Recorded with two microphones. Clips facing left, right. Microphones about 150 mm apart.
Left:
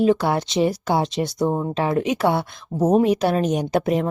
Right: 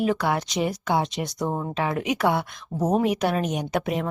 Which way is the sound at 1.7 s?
30° left (ahead or behind).